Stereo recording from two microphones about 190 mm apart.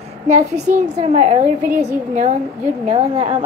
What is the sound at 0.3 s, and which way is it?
A woman's voice, 35° right (ahead or behind).